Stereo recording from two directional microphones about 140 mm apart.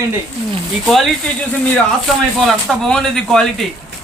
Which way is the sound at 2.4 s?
Centre (ahead or behind).